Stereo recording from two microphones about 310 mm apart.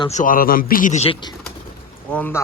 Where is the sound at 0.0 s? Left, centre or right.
Left.